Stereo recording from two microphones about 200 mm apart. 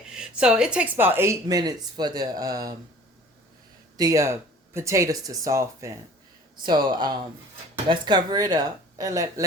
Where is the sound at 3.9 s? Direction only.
15° right (ahead or behind).